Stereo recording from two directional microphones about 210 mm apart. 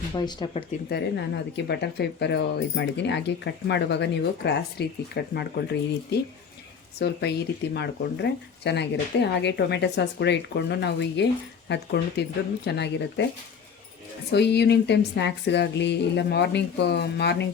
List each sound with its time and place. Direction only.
0.1 s speech: 20° left (ahead or behind)
0.9 s speech: 55° left (ahead or behind)
14.3 s speech: 50° left (ahead or behind)